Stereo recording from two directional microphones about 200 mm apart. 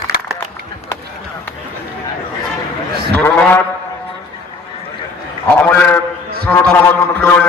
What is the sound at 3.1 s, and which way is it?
Cattle, 10° left (ahead or behind).